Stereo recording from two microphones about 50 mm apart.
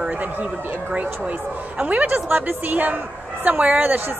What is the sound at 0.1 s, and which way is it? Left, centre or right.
A woman's voice, right.